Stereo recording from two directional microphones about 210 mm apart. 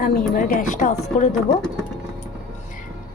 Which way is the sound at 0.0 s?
40° left (ahead or behind).